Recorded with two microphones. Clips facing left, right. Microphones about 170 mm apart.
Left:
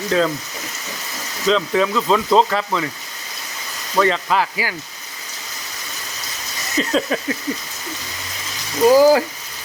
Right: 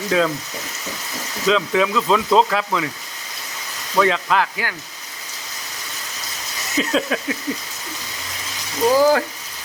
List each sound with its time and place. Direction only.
0.1 s speech: 5° right (ahead or behind)
1.5 s speech: centre (ahead or behind)
3.9 s speech: centre (ahead or behind)
6.7 s speech: centre (ahead or behind)
8.9 s speech: 10° left (ahead or behind)